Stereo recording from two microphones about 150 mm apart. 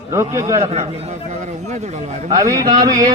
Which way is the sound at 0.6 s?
45° right (ahead or behind).